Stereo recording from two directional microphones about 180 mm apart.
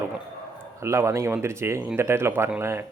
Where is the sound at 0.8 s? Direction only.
15° right (ahead or behind).